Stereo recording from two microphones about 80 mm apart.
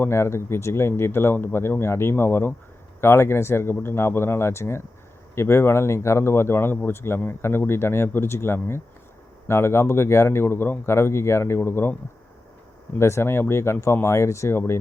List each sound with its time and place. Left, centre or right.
0.0 s speech: left
13.0 s speech: left